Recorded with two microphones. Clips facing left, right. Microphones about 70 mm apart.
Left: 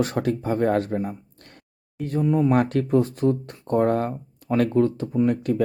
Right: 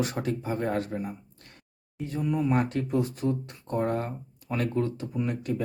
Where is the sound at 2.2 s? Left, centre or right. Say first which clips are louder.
Left 7 dB; left.